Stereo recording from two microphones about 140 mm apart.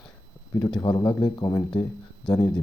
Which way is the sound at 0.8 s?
25° left (ahead or behind).